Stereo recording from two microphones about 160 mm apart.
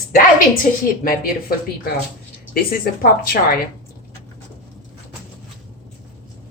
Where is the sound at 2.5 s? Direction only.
70° left (ahead or behind).